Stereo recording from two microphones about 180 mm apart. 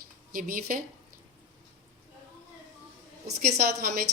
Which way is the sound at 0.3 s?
50° right (ahead or behind).